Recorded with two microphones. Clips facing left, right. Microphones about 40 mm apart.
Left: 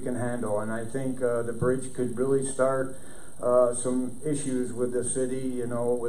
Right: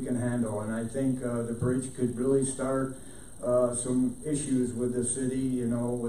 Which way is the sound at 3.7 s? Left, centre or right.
Centre.